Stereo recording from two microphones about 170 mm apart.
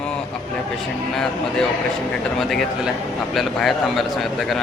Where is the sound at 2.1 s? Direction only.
Centre (ahead or behind).